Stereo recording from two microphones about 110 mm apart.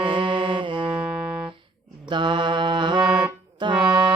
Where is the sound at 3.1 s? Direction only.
5° right (ahead or behind).